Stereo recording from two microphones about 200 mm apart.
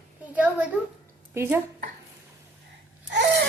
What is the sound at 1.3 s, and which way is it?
Speech, 10° right (ahead or behind).